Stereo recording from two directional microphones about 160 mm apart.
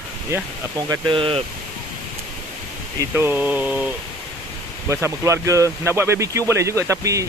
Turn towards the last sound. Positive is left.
turn(degrees=-20)  # may be behind; listen again after turning